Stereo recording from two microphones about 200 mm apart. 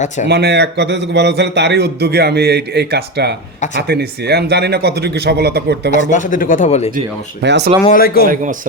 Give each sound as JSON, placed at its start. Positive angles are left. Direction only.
{"t": 0.3, "sound": "a man's voice", "side_deg": -55}
{"t": 5.9, "sound": "speech", "side_deg": 40}
{"t": 7.4, "sound": "a man's voice", "side_deg": -60}
{"t": 7.9, "sound": "a man's voice", "side_deg": 45}